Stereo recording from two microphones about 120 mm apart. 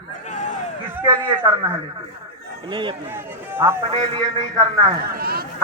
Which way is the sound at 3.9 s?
45° right (ahead or behind).